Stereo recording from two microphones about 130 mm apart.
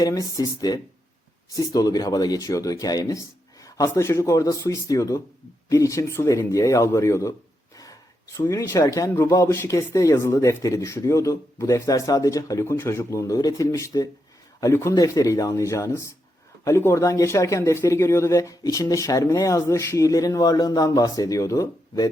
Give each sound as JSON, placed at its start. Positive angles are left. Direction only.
{"t": 0.0, "sound": "speech", "side_deg": 25}